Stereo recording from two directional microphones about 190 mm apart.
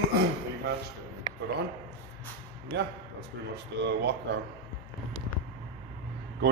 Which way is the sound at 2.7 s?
65° right (ahead or behind).